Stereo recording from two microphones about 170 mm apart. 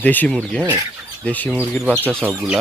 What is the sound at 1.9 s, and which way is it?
Speech, 10° right (ahead or behind).